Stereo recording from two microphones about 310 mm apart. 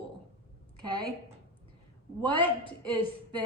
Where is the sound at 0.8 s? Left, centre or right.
Left.